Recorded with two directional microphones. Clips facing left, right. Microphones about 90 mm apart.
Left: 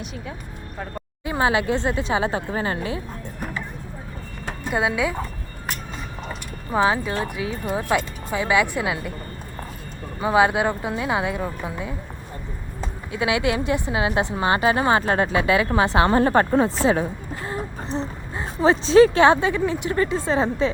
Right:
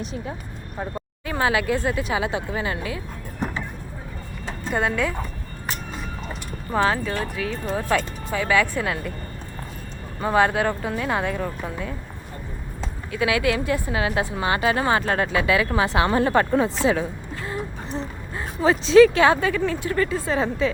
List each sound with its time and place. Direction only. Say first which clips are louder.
0.0 s speech: right 3 dB; 35° right (ahead or behind)
1.2 s a woman's voice: left 2 dB; 20° left (ahead or behind)
4.6 s speech: left 1 dB; 5° left (ahead or behind)
6.7 s speech: left 1 dB; 10° left (ahead or behind)
10.2 s speech: left 1 dB; 10° left (ahead or behind)
13.1 s a woman's voice: even; 20° left (ahead or behind)